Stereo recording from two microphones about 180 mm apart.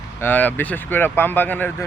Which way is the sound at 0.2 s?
10° left (ahead or behind).